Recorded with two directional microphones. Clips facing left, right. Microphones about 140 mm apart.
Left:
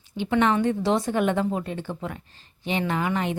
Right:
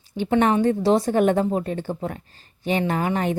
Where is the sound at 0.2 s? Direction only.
40° right (ahead or behind).